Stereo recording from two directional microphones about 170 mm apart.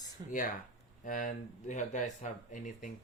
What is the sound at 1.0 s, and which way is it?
Speech, 50° left (ahead or behind).